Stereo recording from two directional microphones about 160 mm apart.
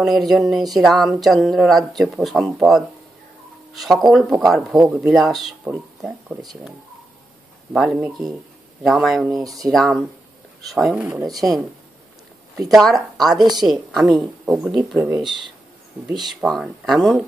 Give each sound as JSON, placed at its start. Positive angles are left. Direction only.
{"t": 0.0, "sound": "speech", "side_deg": 0}
{"t": 4.1, "sound": "speech", "side_deg": -5}
{"t": 7.7, "sound": "speech", "side_deg": -5}
{"t": 9.4, "sound": "speech", "side_deg": -20}
{"t": 9.7, "sound": "speech", "side_deg": 0}
{"t": 12.6, "sound": "speech", "side_deg": 0}
{"t": 13.4, "sound": "speech", "side_deg": -25}
{"t": 13.7, "sound": "speech", "side_deg": 0}
{"t": 15.0, "sound": "speech", "side_deg": -15}
{"t": 16.3, "sound": "speech", "side_deg": 0}